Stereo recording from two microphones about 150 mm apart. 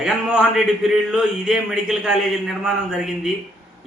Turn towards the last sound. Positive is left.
turn(degrees=0)  # may be behind; listen again after turning